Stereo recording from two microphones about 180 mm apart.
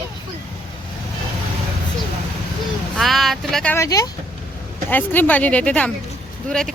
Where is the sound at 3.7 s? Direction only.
20° left (ahead or behind).